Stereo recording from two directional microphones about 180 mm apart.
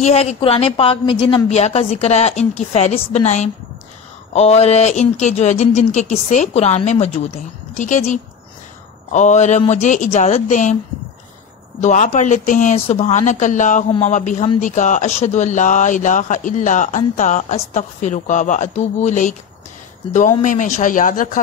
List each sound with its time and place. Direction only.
0.0 s a woman's voice: 35° left (ahead or behind)
11.8 s a woman's voice: 40° left (ahead or behind)